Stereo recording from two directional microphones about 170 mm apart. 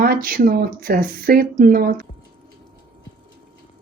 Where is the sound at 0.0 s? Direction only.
60° right (ahead or behind).